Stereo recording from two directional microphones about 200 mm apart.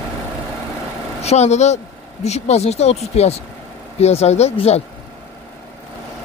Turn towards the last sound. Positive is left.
turn(degrees=30)  # may be behind; listen again after turning